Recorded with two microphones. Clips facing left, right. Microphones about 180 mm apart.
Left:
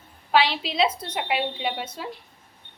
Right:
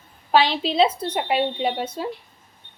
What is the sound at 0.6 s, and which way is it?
A woman's voice, 30° right (ahead or behind).